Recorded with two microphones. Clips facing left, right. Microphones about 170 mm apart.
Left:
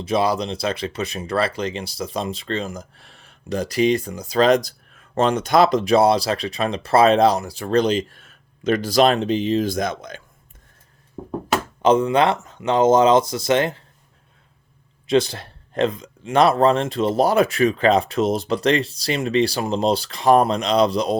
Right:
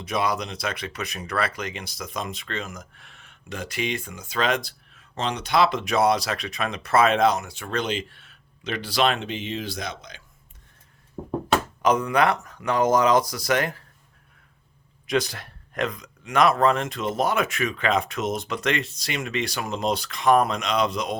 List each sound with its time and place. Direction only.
0.0 s speech: 30° left (ahead or behind); by 10.2 s 50° left (ahead or behind)
11.2 s a sound: 10° right (ahead or behind)
11.8 s speech: 25° left (ahead or behind)
15.0 s speech: 30° left (ahead or behind)